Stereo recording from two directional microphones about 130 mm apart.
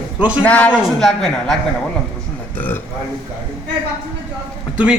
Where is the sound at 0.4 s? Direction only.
10° left (ahead or behind).